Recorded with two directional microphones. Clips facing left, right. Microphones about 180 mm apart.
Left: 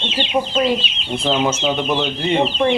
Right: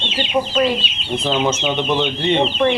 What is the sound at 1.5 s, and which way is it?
Speech, 5° left (ahead or behind).